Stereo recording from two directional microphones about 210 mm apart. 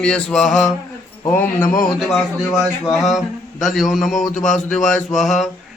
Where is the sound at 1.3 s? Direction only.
10° left (ahead or behind).